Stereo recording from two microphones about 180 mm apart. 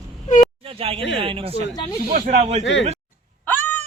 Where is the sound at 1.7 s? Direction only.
20° left (ahead or behind).